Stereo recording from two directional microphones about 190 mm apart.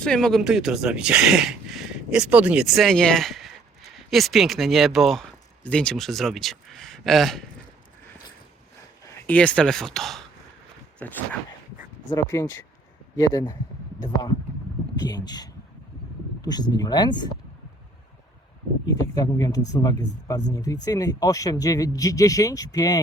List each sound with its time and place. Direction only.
0.0 s speech: 5° left (ahead or behind)
9.0 s speech: 10° left (ahead or behind)
18.9 s speech: 20° left (ahead or behind)